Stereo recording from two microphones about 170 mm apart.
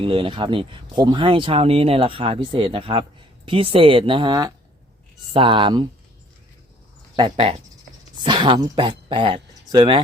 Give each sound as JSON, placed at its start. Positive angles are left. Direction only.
{"t": 0.0, "sound": "speech", "side_deg": -30}
{"t": 7.2, "sound": "speech", "side_deg": -35}